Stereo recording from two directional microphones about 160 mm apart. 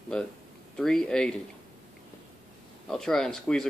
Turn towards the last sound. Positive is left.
turn(degrees=5)  # may be behind; listen again after turning